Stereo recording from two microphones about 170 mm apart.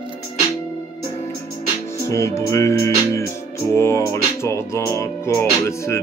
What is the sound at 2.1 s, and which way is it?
Music, 15° left (ahead or behind).